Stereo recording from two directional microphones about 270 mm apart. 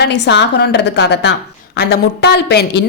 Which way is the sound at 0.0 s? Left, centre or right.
Left.